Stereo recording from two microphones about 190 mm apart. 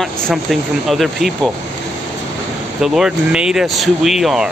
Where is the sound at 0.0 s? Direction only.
Centre (ahead or behind).